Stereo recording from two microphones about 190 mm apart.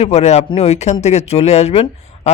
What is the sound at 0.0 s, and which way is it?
A man's voice, 35° left (ahead or behind).